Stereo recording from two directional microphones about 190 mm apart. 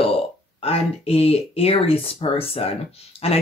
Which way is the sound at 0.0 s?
30° left (ahead or behind).